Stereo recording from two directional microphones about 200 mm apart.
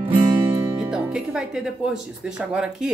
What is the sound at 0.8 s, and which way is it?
Speech, 5° right (ahead or behind).